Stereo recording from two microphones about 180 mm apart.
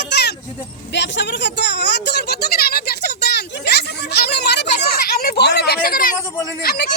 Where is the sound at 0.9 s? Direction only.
75° left (ahead or behind).